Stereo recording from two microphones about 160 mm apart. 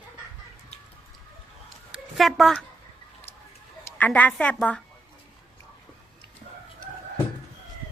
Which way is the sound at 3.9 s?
10° left (ahead or behind).